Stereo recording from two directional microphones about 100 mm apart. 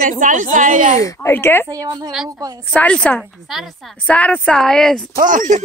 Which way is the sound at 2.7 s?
10° left (ahead or behind).